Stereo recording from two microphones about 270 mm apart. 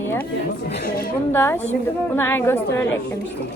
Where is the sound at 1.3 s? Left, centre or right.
Centre.